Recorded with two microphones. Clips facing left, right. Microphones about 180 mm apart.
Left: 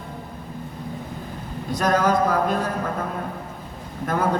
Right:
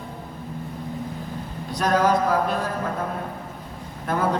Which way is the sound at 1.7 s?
45° left (ahead or behind).